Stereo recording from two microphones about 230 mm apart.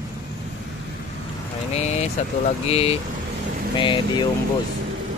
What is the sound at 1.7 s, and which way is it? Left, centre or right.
Speech, left.